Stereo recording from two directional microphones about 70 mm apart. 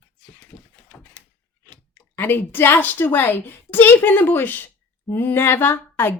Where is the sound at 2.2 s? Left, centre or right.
Left.